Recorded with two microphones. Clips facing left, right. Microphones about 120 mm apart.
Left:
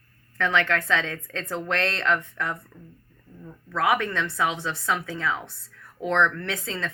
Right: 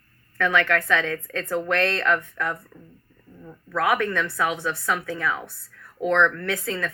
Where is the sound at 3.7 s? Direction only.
20° left (ahead or behind).